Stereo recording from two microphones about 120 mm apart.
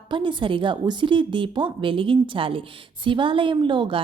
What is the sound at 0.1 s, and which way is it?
A woman's voice, 40° right (ahead or behind).